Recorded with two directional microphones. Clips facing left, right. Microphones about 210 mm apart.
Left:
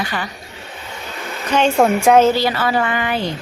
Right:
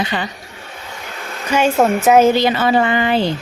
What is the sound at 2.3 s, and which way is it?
A woman's voice, 20° right (ahead or behind).